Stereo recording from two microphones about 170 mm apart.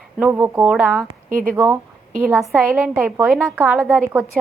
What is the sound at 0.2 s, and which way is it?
Speech, 10° right (ahead or behind).